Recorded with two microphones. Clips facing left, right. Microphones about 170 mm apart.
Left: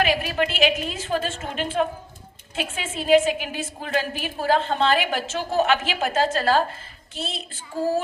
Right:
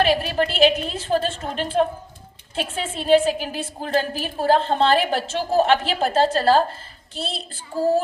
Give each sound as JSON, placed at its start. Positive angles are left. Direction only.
{"t": 0.0, "sound": "a woman's voice", "side_deg": -30}